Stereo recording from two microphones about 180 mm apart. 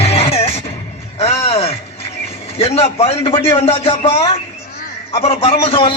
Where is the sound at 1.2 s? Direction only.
35° left (ahead or behind).